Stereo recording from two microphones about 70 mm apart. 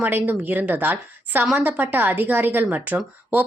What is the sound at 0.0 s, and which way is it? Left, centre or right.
A woman's voice, right.